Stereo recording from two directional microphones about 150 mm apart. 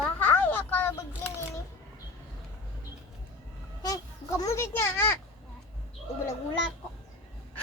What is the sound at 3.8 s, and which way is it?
A child's voice, 25° left (ahead or behind).